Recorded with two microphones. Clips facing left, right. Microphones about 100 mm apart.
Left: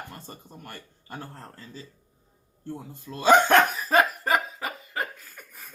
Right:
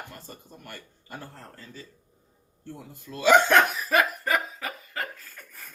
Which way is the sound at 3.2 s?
35° left (ahead or behind).